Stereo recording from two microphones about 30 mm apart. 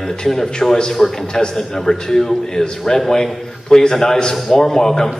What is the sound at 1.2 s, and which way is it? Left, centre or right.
Speech, left.